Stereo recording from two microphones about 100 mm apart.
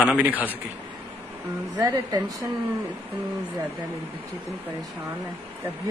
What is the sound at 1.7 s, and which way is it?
Speech, 40° right (ahead or behind).